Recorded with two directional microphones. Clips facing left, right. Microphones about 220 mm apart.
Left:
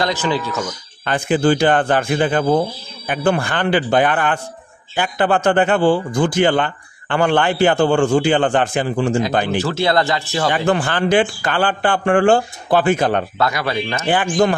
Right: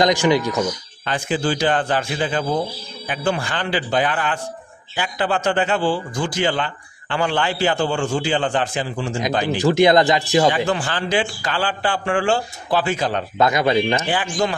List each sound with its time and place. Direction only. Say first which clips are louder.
0.0 s speech: right 3 dB; 15° right (ahead or behind)
1.0 s a man's voice: left 6 dB; 55° left (ahead or behind)
9.6 s speech: right 8 dB; 15° right (ahead or behind)
10.5 s a man's voice: left 4 dB; 55° left (ahead or behind)
13.4 s speech: right 3 dB; 20° right (ahead or behind)
14.0 s speech: left 5 dB; 55° left (ahead or behind)